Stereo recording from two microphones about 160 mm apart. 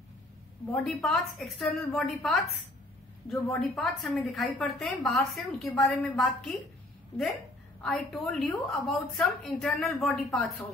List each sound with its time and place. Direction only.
0.7 s a woman's voice: 5° left (ahead or behind)
3.5 s a woman's voice: centre (ahead or behind)
7.8 s a woman's voice: centre (ahead or behind)